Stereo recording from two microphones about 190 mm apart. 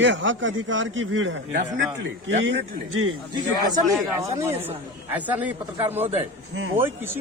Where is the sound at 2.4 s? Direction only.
85° right.